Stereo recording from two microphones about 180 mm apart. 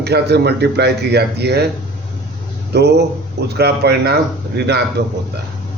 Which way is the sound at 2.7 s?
70° right (ahead or behind).